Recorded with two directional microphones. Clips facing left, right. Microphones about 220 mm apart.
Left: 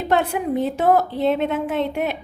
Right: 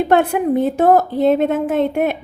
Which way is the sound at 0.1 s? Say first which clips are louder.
Right 3 dB; 55° right (ahead or behind).